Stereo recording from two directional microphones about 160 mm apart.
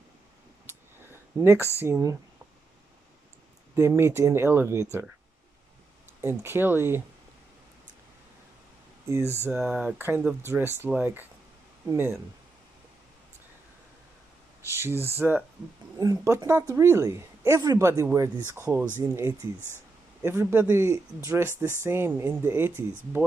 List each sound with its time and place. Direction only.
1.4 s speech: 15° right (ahead or behind)
3.7 s speech: 15° right (ahead or behind)
6.2 s speech: 15° right (ahead or behind)
9.7 s speech: centre (ahead or behind)
9.9 s speech: 15° right (ahead or behind)
14.7 s speech: 15° right (ahead or behind)